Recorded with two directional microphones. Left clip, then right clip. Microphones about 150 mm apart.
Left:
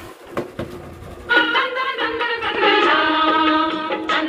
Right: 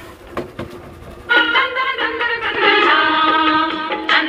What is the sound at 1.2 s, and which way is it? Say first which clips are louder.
Music: right 3 dB; 25° left (ahead or behind).